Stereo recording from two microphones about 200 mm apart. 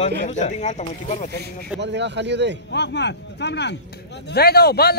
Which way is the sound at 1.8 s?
60° right (ahead or behind).